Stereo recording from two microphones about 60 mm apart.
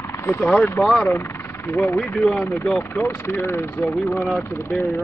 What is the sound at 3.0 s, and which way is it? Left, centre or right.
Speech, left.